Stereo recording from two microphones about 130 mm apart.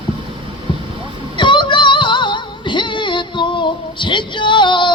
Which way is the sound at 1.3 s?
40° left (ahead or behind).